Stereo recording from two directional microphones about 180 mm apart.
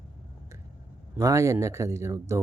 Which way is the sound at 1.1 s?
15° right (ahead or behind).